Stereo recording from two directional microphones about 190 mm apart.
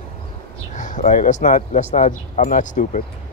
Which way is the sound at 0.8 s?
40° left (ahead or behind).